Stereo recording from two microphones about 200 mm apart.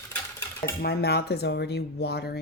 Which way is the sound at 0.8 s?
50° left (ahead or behind).